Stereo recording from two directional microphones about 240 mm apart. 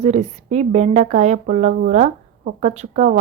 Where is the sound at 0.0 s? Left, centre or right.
Right.